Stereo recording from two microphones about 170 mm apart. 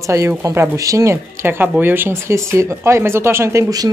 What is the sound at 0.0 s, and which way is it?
Speech, 20° right (ahead or behind).